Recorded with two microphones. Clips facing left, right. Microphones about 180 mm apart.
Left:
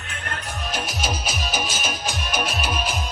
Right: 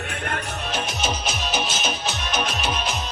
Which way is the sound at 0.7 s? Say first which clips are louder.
Right 1 dB; 10° left (ahead or behind).